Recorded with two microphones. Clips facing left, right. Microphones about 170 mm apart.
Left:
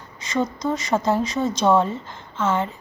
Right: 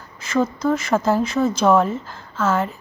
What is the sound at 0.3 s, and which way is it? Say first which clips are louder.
Speech: right 4 dB; 5° right (ahead or behind).